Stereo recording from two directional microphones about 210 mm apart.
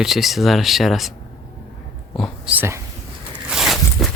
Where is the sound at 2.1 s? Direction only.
5° right (ahead or behind).